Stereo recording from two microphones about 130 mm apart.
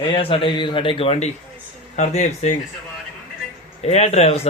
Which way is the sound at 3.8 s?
55° left (ahead or behind).